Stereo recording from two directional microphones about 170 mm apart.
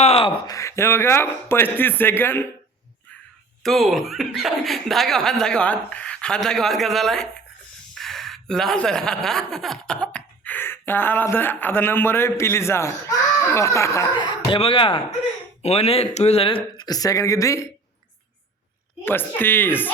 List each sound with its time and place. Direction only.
0.0 s a sound: 35° left (ahead or behind)
0.4 s speech: 20° left (ahead or behind)
3.6 s speech: centre (ahead or behind); by 14.3 s 20° left (ahead or behind)
14.5 s speech: 30° left (ahead or behind)
19.0 s speech: 10° left (ahead or behind)